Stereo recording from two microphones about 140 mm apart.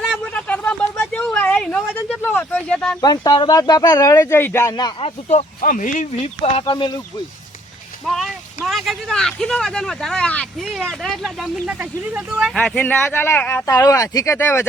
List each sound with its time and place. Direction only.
0.3 s a sound: 10° left (ahead or behind)
2.2 s speech: 10° left (ahead or behind)
3.0 s speech: 30° left (ahead or behind)
4.8 s speech: 45° left (ahead or behind)
5.5 s speech: 70° left (ahead or behind); by 7.0 s 35° left (ahead or behind)
8.0 s speech: centre (ahead or behind)
11.6 s speech: 10° right (ahead or behind)
12.5 s speech: 10° left (ahead or behind)